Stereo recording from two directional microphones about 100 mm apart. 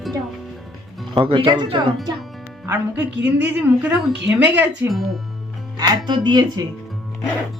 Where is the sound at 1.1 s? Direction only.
55° right (ahead or behind).